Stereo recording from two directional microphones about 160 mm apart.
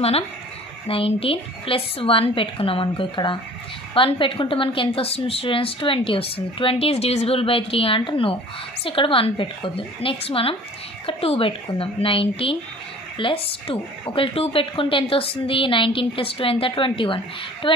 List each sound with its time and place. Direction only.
0.8 s a woman's voice: 35° left (ahead or behind)